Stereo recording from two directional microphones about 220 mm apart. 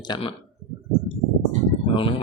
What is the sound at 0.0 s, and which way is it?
Speech, 20° left (ahead or behind).